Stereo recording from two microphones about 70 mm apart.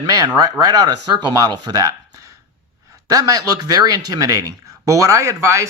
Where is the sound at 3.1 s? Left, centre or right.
Right.